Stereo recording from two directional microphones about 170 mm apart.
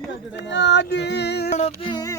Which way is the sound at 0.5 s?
90° left.